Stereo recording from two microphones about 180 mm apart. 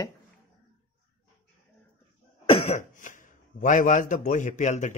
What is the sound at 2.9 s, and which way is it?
A man's voice, 45° left (ahead or behind).